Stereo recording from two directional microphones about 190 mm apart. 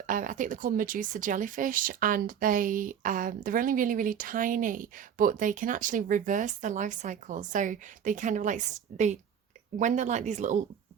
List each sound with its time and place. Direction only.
0.1 s speech: 45° right (ahead or behind)